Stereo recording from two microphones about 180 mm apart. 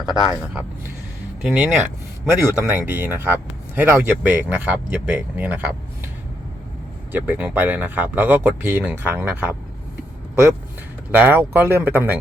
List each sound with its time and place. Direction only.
0.0 s speech: 20° left (ahead or behind)
1.4 s speech: 5° right (ahead or behind)
7.1 s speech: 10° right (ahead or behind)
11.1 s speech: 10° right (ahead or behind)